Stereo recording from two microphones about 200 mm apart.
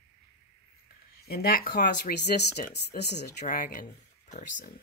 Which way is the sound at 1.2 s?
50° left (ahead or behind).